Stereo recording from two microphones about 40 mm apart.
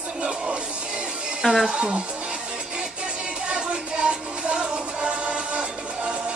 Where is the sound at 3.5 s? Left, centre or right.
Centre.